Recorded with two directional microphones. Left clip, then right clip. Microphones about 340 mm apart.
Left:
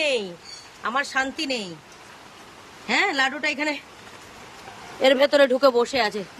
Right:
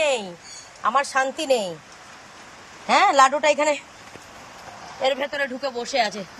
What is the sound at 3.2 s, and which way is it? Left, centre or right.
Speech, centre.